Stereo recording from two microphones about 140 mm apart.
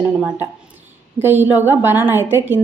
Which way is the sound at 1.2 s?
15° right (ahead or behind).